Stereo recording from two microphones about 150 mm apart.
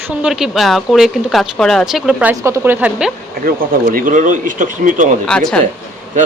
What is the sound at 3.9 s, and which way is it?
Speech, 65° right (ahead or behind).